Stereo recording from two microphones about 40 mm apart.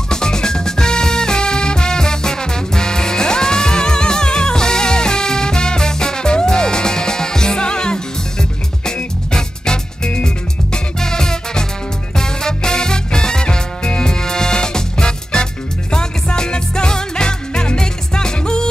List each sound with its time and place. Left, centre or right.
0.1 s music: centre
12.2 s swing music: centre
15.9 s music: left